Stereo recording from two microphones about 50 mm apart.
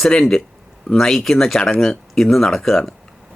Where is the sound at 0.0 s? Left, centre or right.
Centre.